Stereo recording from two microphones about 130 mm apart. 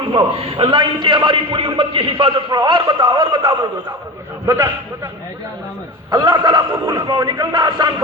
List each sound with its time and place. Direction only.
0.0 s a man's voice: 40° right (ahead or behind)
4.4 s a man's voice: 20° right (ahead or behind)
6.1 s a man's voice: 30° right (ahead or behind)